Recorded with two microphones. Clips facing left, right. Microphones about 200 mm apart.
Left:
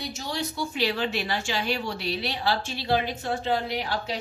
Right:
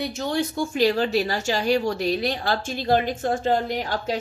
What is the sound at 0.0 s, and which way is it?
A woman's voice, 55° right (ahead or behind).